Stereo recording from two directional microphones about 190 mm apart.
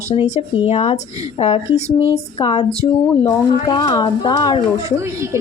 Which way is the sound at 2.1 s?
30° left (ahead or behind).